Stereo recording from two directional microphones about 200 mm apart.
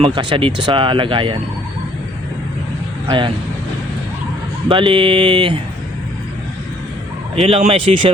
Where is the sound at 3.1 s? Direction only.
25° right (ahead or behind).